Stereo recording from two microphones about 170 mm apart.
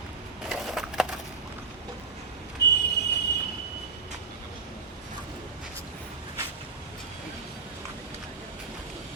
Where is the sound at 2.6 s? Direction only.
80° left.